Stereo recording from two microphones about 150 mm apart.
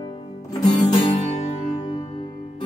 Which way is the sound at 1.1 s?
45° left (ahead or behind).